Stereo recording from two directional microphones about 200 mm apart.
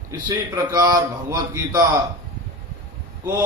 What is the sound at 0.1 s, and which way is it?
A man's voice, 15° right (ahead or behind).